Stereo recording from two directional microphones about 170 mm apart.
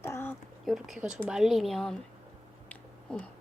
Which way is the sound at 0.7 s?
Centre (ahead or behind).